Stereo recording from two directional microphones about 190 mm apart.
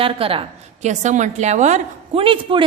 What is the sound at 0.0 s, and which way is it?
A woman's voice, 30° right (ahead or behind).